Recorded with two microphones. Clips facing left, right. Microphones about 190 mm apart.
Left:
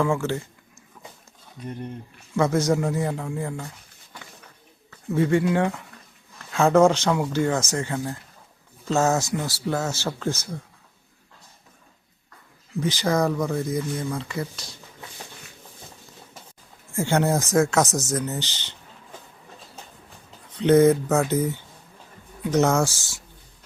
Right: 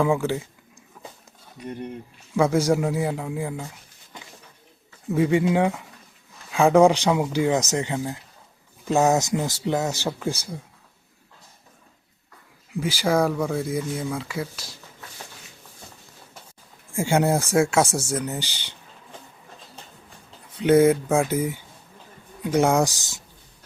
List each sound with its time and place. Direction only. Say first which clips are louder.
0.0 s speech: right 2 dB; 15° right (ahead or behind)
2.3 s speech: right 1 dB; 10° right (ahead or behind)
4.1 s a sound: right 1 dB; 20° right (ahead or behind)
5.1 s speech: right 1 dB; 15° right (ahead or behind)
12.7 s speech: right 1 dB; 10° right (ahead or behind)
16.9 s speech: right 1 dB; 10° right (ahead or behind)
20.6 s speech: even; 10° right (ahead or behind)